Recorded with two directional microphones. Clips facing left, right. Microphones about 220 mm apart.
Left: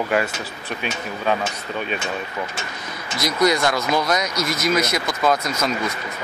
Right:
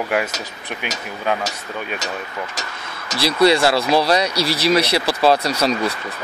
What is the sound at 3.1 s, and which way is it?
Speech, 30° right (ahead or behind).